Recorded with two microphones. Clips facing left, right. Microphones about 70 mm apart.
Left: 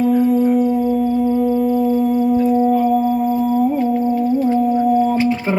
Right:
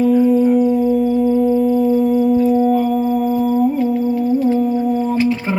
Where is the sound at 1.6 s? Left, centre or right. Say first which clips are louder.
Right 2 dB; left.